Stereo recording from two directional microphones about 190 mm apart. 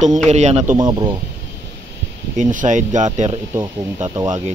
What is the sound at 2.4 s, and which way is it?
Speech, 40° right (ahead or behind).